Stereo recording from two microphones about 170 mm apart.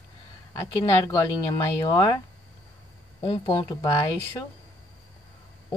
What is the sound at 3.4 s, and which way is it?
Speech, 25° left (ahead or behind).